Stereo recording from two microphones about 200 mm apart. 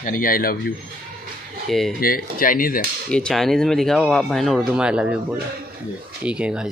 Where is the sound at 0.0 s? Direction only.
45° left (ahead or behind).